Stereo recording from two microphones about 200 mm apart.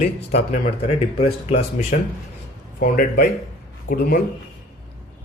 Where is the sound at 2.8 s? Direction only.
50° left (ahead or behind).